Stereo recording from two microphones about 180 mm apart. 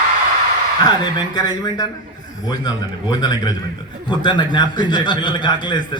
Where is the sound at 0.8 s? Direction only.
25° left (ahead or behind).